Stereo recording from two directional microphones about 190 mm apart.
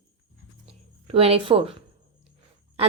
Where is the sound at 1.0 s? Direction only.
30° right (ahead or behind).